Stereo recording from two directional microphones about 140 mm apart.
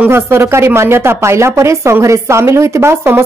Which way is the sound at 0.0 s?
15° right (ahead or behind).